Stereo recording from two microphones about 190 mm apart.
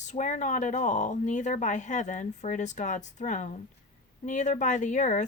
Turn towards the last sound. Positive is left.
turn(degrees=40)  # may be behind; listen again after turning